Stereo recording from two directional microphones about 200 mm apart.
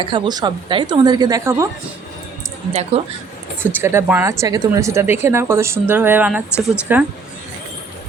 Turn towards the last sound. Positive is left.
turn(degrees=-10)  # may be behind; listen again after turning